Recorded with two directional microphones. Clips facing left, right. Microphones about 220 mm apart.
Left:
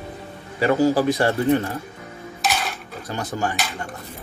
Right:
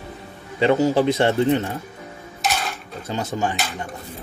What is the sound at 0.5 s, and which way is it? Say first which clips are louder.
A man's voice: right 1 dB; 20° right (ahead or behind).